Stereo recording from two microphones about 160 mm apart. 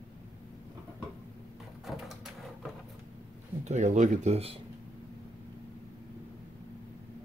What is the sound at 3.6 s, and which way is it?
Speech, 50° right (ahead or behind).